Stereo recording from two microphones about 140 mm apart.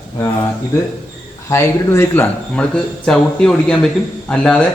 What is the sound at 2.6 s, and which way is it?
A man's voice, 5° left (ahead or behind).